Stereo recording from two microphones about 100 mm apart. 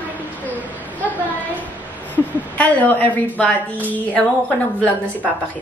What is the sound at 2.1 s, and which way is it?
A woman's voice, 15° left (ahead or behind).